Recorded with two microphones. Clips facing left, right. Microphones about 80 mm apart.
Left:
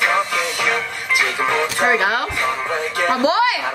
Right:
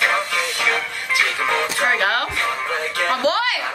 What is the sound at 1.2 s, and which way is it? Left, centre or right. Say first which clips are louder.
A woman's voice: left 1 dB; left.